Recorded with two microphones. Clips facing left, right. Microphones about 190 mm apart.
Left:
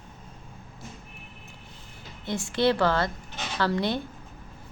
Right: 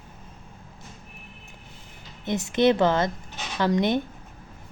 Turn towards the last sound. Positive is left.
turn(degrees=-20)  # may be behind; listen again after turning